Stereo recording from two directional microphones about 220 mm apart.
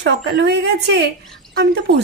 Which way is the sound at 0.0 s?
55° right (ahead or behind).